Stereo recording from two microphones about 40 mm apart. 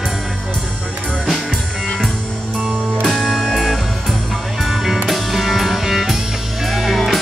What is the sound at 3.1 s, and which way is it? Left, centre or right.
Music, centre.